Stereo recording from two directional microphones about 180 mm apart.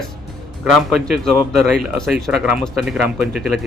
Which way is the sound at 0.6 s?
Centre (ahead or behind).